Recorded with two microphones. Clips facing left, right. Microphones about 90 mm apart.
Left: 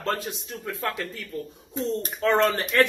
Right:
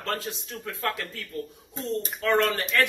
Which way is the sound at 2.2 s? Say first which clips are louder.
Left 2 dB; 25° left (ahead or behind).